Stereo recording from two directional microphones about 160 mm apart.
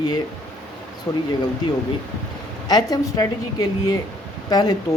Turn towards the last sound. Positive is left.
turn(degrees=25)  # may be behind; listen again after turning